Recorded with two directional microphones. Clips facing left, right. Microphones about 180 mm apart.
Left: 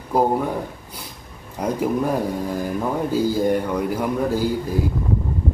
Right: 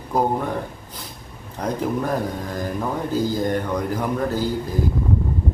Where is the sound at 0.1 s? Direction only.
10° left (ahead or behind).